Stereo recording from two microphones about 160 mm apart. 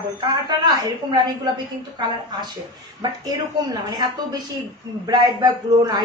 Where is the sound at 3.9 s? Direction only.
25° right (ahead or behind).